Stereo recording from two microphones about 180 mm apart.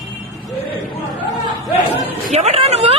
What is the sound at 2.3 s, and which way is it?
Speech, 35° right (ahead or behind).